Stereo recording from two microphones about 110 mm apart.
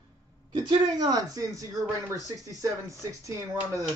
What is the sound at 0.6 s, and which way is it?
Speech, 40° right (ahead or behind).